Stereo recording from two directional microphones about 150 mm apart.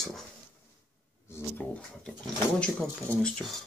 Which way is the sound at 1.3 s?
15° left (ahead or behind).